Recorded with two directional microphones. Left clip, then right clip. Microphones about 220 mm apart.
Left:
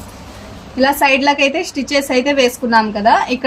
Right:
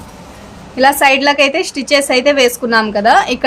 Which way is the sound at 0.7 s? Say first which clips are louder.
Right 3 dB; 40° right (ahead or behind).